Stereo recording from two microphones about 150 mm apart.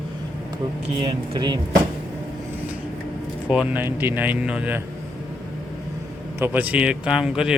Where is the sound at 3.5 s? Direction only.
10° right (ahead or behind).